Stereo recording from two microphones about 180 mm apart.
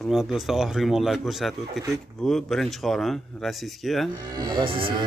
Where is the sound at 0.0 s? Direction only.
Centre (ahead or behind).